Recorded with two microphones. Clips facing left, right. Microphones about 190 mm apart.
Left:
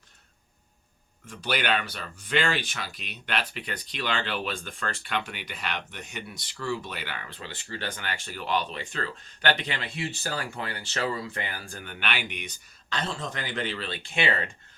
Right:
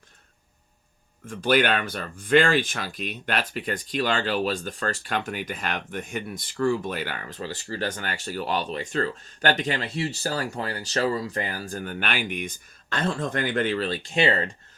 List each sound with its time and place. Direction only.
1.3 s speech: 50° right (ahead or behind)